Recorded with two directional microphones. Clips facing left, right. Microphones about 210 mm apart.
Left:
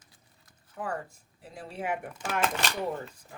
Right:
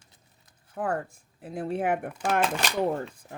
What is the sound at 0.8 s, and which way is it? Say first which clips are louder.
Speech: right 6 dB; 55° right (ahead or behind).